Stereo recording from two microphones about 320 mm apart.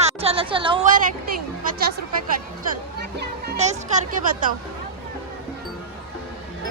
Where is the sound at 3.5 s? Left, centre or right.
Right.